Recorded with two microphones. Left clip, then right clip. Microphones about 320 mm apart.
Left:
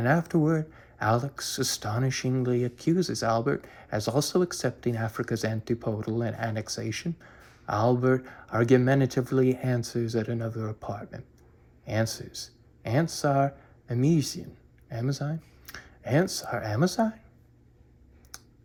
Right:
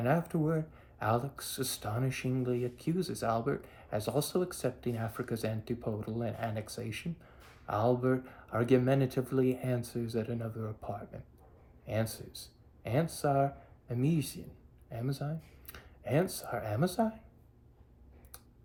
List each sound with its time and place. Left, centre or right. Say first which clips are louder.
0.0 s speech: left 6 dB; centre